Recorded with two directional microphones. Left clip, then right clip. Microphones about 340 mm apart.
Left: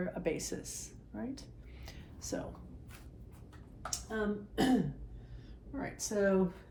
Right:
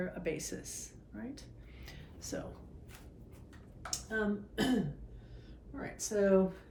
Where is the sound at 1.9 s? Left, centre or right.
Centre.